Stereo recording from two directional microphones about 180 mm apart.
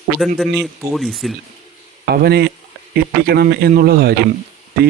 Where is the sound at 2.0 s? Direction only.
65° right (ahead or behind).